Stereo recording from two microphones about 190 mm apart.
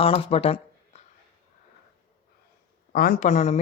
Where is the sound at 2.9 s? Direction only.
50° left (ahead or behind).